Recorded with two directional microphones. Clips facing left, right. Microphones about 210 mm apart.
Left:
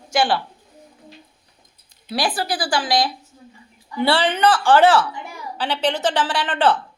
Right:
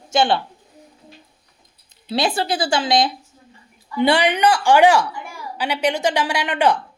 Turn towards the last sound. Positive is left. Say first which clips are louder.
# right 1 dB
turn(degrees=-15)  # may be behind; listen again after turning